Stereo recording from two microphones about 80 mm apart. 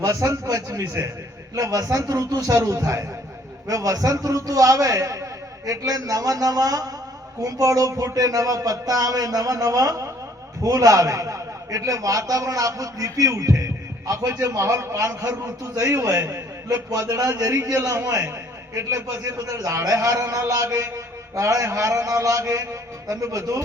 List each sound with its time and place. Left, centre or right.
0.0 s a man's voice: right
1.5 s a man's voice: right
16.9 s a man's voice: right
20.2 s a man's voice: right
20.5 s a man's voice: right